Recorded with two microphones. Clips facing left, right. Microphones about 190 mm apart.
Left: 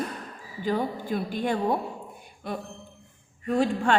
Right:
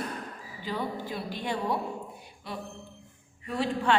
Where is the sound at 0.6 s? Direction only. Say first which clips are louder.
Left 6 dB; 50° left (ahead or behind).